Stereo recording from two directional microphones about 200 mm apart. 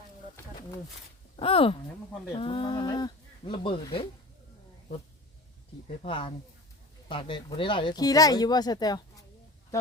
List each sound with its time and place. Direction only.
1.4 s speech: 25° left (ahead or behind)
6.0 s speech: 25° left (ahead or behind)